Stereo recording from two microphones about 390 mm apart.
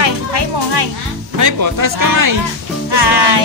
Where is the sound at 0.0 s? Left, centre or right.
Right.